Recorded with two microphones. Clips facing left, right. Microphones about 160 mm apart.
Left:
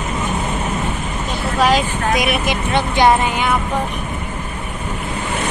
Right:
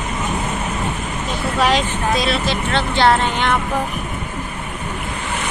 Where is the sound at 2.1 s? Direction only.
15° left (ahead or behind).